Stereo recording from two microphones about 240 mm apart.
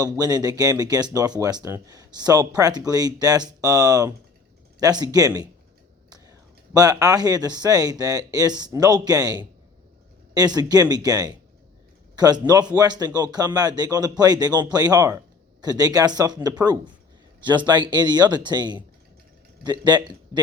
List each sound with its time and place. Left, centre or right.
0.0 s speech: centre
6.1 s a sound: centre
6.7 s speech: centre